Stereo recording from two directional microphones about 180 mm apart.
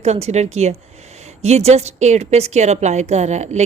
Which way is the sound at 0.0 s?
40° right (ahead or behind).